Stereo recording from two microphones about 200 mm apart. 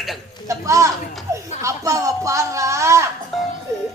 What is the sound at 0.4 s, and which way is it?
Speech, 15° right (ahead or behind).